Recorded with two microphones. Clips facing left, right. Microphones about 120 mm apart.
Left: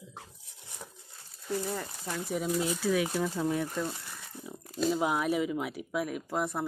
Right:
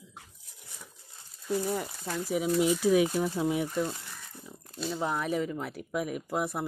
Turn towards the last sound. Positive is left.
turn(degrees=-5)  # may be behind; listen again after turning